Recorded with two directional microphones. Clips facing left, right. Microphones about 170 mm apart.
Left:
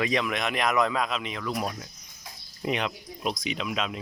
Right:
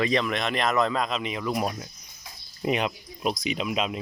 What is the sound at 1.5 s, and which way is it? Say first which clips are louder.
Speech: right 3 dB; 20° right (ahead or behind).